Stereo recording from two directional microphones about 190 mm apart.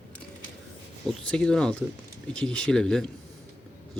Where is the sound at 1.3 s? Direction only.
5° left (ahead or behind).